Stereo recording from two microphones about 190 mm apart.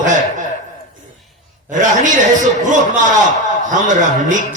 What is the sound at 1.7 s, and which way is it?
Speech, 40° right (ahead or behind).